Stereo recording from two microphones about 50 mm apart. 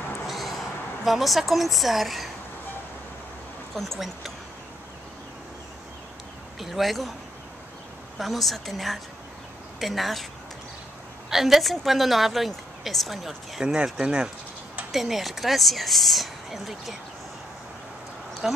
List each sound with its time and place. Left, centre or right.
0.3 s a sound: centre
1.0 s speech: centre
3.7 s speech: centre
6.6 s speech: centre
8.2 s speech: centre
11.2 s speech: centre
13.6 s speech: centre
14.9 s speech: centre
18.4 s speech: centre